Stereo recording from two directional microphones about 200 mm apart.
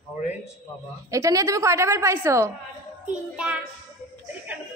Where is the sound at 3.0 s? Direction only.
5° right (ahead or behind).